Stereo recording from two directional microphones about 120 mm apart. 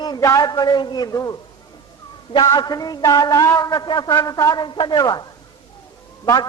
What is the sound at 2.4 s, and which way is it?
A man's voice, 30° left (ahead or behind).